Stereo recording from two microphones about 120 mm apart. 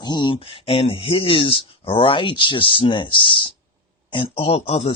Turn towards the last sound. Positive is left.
turn(degrees=55)  # may be behind; listen again after turning